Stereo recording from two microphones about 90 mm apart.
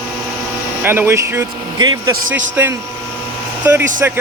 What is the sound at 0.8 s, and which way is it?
Speech, 25° right (ahead or behind).